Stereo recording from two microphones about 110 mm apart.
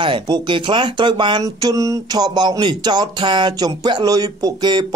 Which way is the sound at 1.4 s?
30° right (ahead or behind).